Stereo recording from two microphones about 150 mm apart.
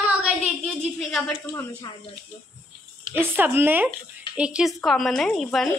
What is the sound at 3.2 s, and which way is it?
Speech, 15° right (ahead or behind).